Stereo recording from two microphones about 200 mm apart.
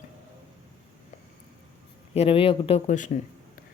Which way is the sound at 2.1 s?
30° left (ahead or behind).